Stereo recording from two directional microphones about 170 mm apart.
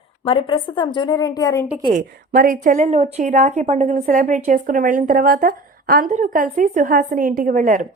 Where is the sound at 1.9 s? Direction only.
55° right (ahead or behind).